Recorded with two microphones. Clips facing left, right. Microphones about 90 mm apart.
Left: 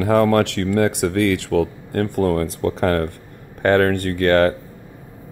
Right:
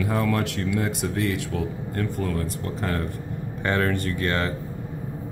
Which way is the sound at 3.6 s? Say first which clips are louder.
Left 8 dB; 55° left (ahead or behind).